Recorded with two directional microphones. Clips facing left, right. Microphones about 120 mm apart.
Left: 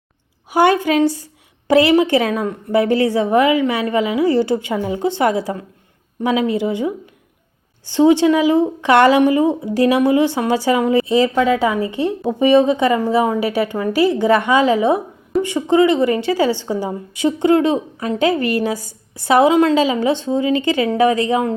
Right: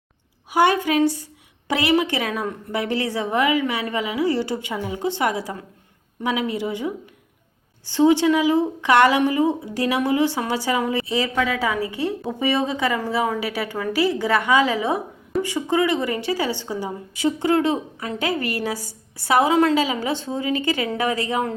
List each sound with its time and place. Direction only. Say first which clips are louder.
0.5 s a woman's voice: left 4 dB; 30° left (ahead or behind)